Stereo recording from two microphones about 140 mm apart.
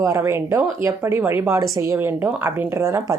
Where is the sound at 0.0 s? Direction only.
20° right (ahead or behind).